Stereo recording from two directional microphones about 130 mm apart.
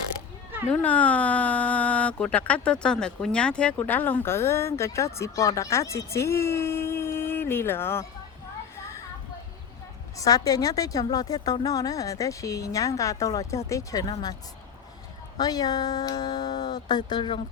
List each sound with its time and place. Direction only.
0.7 s speech: 10° left (ahead or behind)
10.2 s a woman's voice: 25° left (ahead or behind)
15.4 s speech: 30° left (ahead or behind)